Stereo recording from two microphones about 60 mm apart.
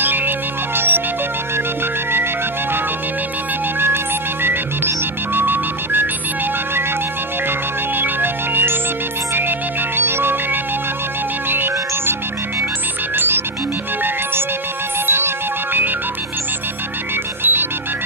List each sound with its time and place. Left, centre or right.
0.0 s music: right
3.8 s music: right
8.0 s music: right
15.0 s music: right
17.4 s music: right